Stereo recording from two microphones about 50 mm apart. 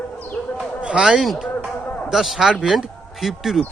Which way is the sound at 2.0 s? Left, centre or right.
Centre.